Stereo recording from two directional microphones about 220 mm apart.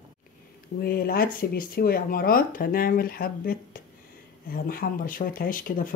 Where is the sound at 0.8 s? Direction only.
45° left (ahead or behind).